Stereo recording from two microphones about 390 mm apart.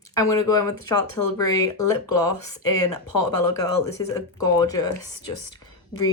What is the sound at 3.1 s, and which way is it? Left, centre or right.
Speech, left.